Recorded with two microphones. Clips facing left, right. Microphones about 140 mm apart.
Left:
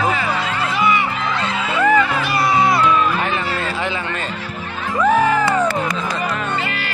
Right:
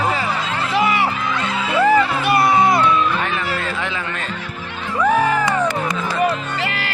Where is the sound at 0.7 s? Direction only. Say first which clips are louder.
Right 1 dB; 85° right.